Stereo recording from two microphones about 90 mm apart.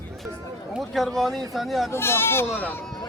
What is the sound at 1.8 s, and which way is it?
Speech, 25° left (ahead or behind).